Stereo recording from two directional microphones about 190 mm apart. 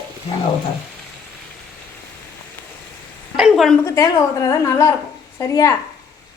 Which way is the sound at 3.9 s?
20° left (ahead or behind).